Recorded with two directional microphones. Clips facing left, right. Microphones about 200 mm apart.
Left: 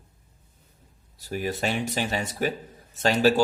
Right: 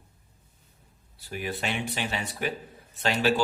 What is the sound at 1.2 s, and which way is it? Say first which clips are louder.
A man's voice: left 5 dB; 40° left (ahead or behind).